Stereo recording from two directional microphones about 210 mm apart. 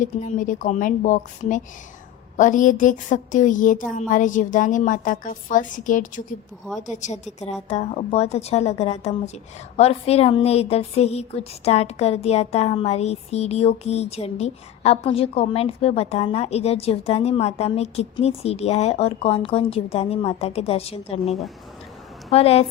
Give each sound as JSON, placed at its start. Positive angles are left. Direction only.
{"t": 0.0, "sound": "a woman's voice", "side_deg": 35}